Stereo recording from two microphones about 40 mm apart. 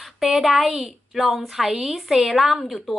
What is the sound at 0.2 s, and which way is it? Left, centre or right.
Speech, centre.